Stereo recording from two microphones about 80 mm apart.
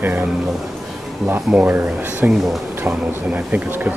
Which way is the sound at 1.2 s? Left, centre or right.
Right.